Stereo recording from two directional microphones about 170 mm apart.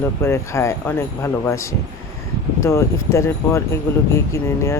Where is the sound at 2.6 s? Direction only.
15° left (ahead or behind).